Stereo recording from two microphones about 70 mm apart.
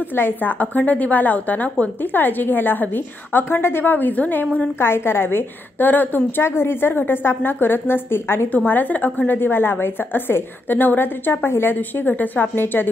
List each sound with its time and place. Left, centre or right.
0.1 s a woman's voice: left